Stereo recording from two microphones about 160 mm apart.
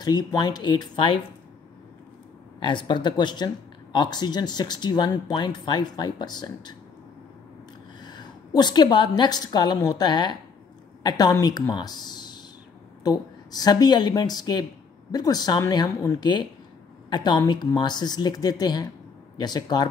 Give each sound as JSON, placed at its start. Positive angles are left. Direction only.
{"t": 0.0, "sound": "speech", "side_deg": 25}
{"t": 2.6, "sound": "speech", "side_deg": 30}
{"t": 8.0, "sound": "a woman's voice", "side_deg": 25}